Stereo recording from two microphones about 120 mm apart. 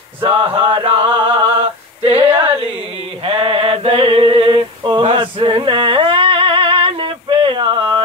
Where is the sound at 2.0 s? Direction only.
55° right (ahead or behind).